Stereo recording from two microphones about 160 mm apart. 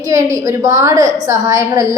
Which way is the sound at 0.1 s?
20° right (ahead or behind).